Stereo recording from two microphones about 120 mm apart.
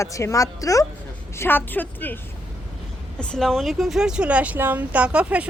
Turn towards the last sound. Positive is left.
turn(degrees=-10)  # may be behind; listen again after turning